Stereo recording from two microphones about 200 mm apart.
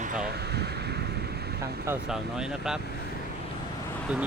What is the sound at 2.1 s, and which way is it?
Speech, 5° right (ahead or behind).